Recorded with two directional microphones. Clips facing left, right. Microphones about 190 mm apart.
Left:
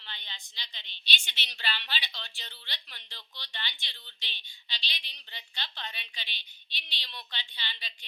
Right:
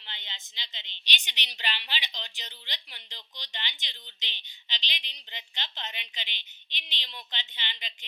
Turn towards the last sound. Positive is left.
turn(degrees=-20)  # may be behind; listen again after turning